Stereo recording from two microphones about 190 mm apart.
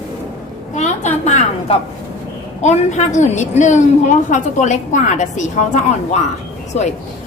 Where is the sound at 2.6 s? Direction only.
40° left (ahead or behind).